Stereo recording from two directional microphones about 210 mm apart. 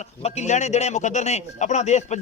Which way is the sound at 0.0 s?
30° left (ahead or behind).